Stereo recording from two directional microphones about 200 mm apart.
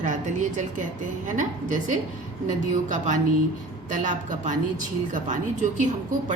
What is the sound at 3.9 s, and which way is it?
A woman's voice, 40° right (ahead or behind).